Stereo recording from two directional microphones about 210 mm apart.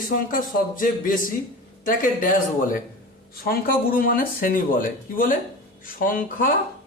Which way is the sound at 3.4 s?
45° left (ahead or behind).